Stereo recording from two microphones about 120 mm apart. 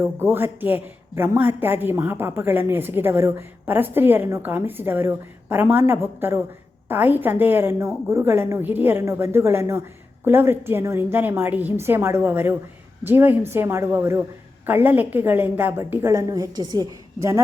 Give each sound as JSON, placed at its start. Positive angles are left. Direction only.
{"t": 0.0, "sound": "a woman's voice", "side_deg": -20}